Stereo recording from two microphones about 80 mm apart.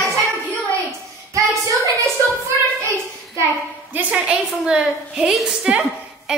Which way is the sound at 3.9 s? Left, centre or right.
Centre.